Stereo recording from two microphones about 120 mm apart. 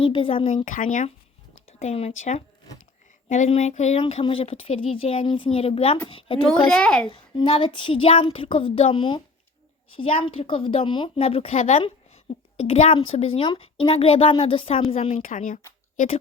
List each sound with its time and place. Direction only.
0.0 s speech: 50° left (ahead or behind)
0.5 s speech: 90° left
1.8 s speech: 60° left (ahead or behind)
3.2 s a sound: 90° left
3.6 s speech: 70° left (ahead or behind)
4.1 s speech: 50° left (ahead or behind)
6.6 s a child's voice: 5° left (ahead or behind)
7.1 s speech: 50° left (ahead or behind)
15.2 s speech: 90° left